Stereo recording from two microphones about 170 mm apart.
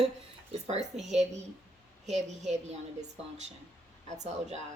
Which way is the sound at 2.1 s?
40° right (ahead or behind).